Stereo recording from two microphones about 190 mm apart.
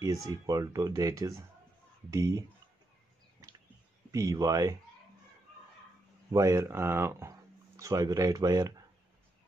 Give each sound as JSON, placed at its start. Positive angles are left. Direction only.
{"t": 0.0, "sound": "speech", "side_deg": -20}
{"t": 4.1, "sound": "speech", "side_deg": -15}
{"t": 6.3, "sound": "speech", "side_deg": -15}